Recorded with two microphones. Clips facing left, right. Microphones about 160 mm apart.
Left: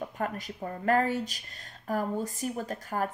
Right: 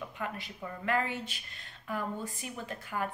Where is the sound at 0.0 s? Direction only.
45° left (ahead or behind).